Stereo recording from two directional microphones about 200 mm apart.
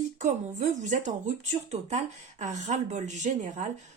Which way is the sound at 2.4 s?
35° right (ahead or behind).